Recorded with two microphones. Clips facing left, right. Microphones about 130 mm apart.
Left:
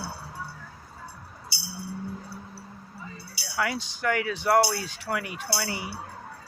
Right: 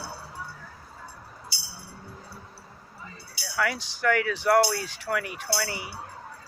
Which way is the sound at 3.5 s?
20° left (ahead or behind).